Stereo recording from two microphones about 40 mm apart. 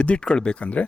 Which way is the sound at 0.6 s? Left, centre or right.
Left.